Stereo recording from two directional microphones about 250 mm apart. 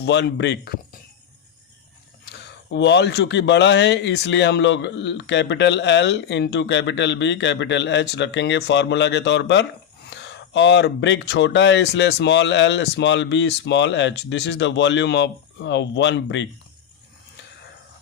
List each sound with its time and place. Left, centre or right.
0.0 s a man's voice: left
2.2 s a man's voice: left